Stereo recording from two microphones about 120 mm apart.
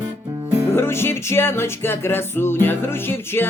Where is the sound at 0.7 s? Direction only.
20° left (ahead or behind).